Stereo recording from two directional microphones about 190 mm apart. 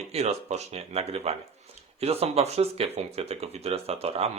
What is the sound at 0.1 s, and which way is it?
Speech, 35° right (ahead or behind).